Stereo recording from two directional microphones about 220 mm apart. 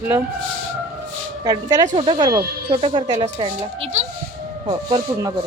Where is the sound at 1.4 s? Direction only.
20° right (ahead or behind).